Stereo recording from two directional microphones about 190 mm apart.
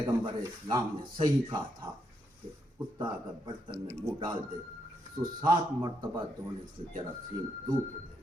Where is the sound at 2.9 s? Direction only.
25° right (ahead or behind).